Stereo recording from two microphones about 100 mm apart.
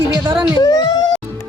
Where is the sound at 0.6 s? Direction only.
40° left (ahead or behind).